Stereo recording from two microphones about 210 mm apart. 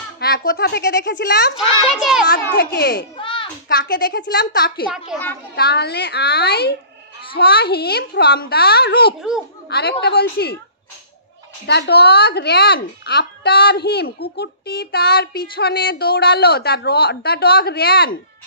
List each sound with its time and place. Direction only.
0.2 s child singing: 45° left (ahead or behind)
2.0 s a child's voice: centre (ahead or behind)
2.3 s child singing: 50° left (ahead or behind)
3.2 s a sound: 25° left (ahead or behind)
3.6 s child singing: 45° left (ahead or behind)
4.8 s a child's voice: 5° right (ahead or behind)
5.6 s child singing: 50° left (ahead or behind)
11.6 s child singing: 50° left (ahead or behind)